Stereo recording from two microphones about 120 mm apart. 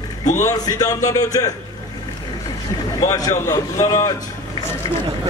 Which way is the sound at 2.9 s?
30° left (ahead or behind).